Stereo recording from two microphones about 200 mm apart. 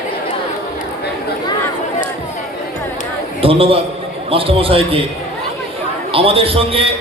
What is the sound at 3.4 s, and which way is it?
A man's voice, 25° right (ahead or behind).